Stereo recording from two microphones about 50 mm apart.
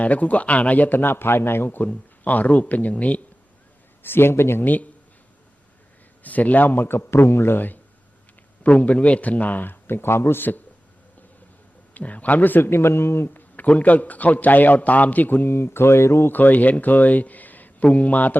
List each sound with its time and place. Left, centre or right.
0.0 s a man's voice: left
1.9 s a man's voice: left
4.0 s a man's voice: left
4.6 s a man's voice: left
6.2 s a man's voice: left
6.7 s a man's voice: left
8.6 s a man's voice: left
11.9 s speech: left
13.7 s a man's voice: left
16.3 s a man's voice: left